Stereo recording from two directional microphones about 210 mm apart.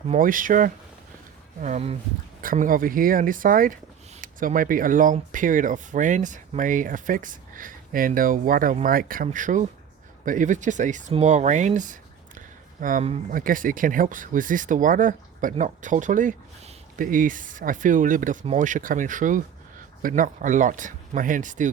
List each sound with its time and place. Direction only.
0.1 s speech: 40° right (ahead or behind)